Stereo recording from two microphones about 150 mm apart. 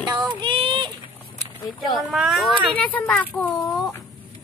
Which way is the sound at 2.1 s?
Centre (ahead or behind).